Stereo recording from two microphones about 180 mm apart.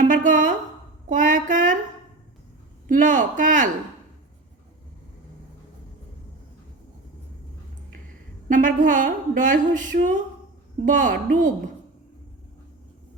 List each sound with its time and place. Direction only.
0.0 s speech: 45° right (ahead or behind)
2.8 s speech: 45° right (ahead or behind)
8.4 s speech: 45° right (ahead or behind)